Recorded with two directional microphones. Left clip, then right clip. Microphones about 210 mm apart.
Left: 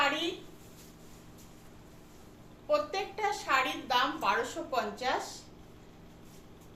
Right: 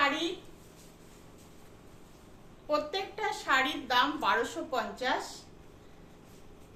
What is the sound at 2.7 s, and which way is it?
A woman's voice, 15° right (ahead or behind).